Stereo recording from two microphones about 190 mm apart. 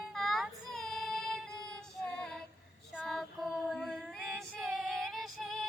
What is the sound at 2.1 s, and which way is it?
Female singing, 5° left (ahead or behind).